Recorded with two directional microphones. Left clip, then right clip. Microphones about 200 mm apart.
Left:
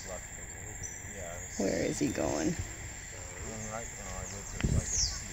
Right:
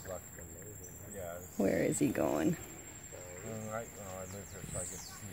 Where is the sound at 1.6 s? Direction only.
5° right (ahead or behind).